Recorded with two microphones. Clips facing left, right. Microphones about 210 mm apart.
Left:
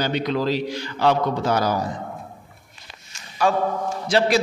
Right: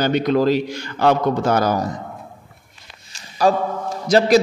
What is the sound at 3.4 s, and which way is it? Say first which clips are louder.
A man's voice: right 3 dB; 35° right (ahead or behind).